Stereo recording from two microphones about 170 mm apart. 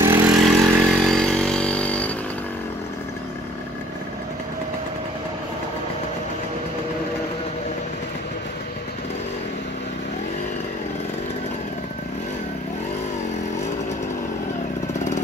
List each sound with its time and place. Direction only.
0.0 s vehicle: 10° right (ahead or behind)
0.5 s vehicle: centre (ahead or behind)